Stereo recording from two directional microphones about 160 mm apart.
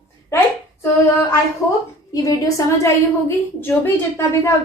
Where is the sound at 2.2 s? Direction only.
20° left (ahead or behind).